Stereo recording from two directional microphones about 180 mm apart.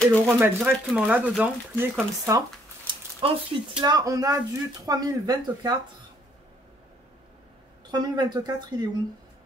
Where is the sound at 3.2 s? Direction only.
30° right (ahead or behind).